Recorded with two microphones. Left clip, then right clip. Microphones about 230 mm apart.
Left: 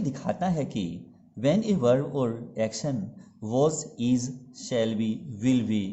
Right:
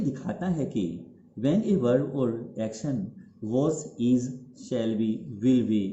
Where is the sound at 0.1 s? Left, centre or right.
Left.